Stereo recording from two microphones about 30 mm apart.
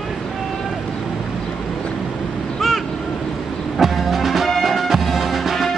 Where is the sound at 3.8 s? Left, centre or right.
Centre.